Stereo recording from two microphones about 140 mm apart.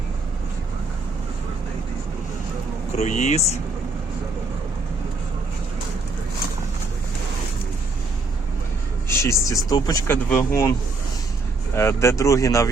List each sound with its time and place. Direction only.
2.9 s speech: 50° left (ahead or behind)
9.0 s speech: 20° left (ahead or behind)